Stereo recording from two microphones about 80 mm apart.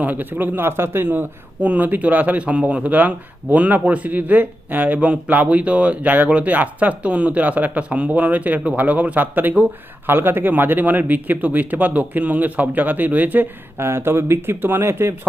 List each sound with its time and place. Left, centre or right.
0.0 s a man's voice: right
13.7 s speech: right